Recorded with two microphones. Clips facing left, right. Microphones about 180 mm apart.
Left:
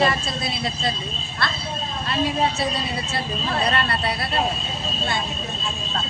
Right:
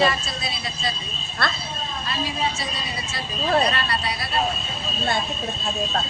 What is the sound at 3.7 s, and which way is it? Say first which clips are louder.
Speech: left 3 dB; 55° left (ahead or behind).